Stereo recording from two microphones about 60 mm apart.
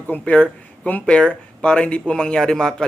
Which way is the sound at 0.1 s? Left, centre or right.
Centre.